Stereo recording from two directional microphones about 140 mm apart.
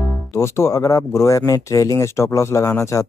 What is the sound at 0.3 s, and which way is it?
Speech, 20° left (ahead or behind).